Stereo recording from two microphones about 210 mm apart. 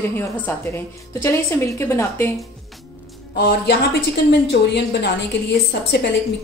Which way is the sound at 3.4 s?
50° left (ahead or behind).